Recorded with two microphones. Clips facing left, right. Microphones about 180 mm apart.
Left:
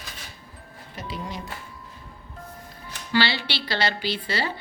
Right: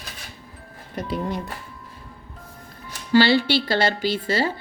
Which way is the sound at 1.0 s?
55° right (ahead or behind).